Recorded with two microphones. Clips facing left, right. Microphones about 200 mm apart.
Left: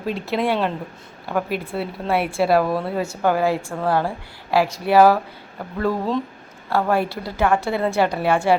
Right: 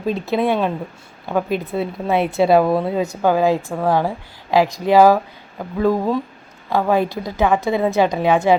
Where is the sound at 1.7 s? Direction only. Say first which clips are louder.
Right 2 dB; 15° right (ahead or behind).